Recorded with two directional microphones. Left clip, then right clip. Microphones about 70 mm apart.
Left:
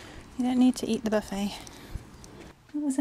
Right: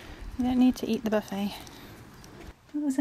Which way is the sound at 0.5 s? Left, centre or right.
Centre.